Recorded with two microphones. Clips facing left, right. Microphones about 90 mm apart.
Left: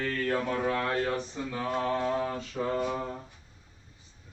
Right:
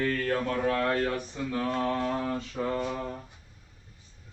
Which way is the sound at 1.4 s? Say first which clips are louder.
Right 2 dB; 15° left (ahead or behind).